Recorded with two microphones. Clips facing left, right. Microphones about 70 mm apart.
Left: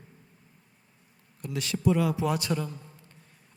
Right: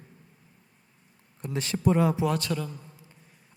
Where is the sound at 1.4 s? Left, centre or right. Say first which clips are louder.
Right 1 dB; right.